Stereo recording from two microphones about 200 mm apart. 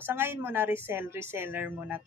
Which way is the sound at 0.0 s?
10° right (ahead or behind).